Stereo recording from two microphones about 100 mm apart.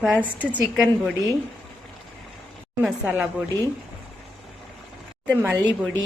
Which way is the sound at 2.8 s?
5° right (ahead or behind).